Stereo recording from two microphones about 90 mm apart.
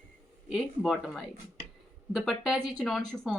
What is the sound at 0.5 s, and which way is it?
A woman's voice, 5° right (ahead or behind).